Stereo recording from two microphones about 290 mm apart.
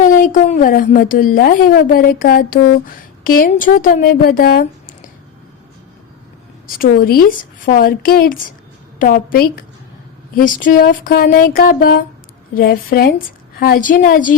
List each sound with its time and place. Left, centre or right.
0.0 s a woman's voice: left
6.7 s a woman's voice: left